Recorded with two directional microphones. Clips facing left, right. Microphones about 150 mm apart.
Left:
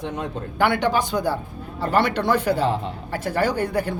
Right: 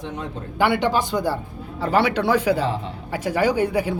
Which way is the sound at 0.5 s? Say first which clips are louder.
Right 1 dB; 5° right (ahead or behind).